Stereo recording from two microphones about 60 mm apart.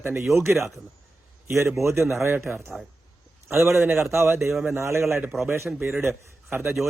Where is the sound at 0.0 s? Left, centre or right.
Right.